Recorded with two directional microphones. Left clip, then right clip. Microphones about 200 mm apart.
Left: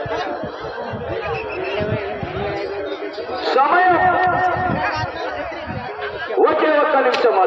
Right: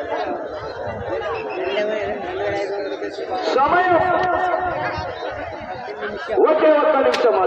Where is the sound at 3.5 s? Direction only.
20° left (ahead or behind).